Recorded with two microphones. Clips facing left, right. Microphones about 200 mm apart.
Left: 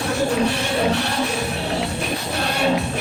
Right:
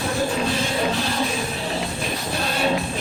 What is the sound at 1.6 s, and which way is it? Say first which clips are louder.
Music: left 3 dB; 70° left (ahead or behind).